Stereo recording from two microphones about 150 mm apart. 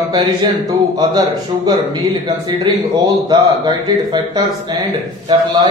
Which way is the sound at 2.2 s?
30° right (ahead or behind).